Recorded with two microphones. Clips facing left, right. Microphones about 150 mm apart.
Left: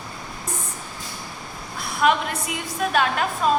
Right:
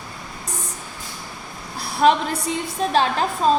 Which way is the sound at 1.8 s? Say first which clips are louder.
Right 3 dB; 35° right (ahead or behind).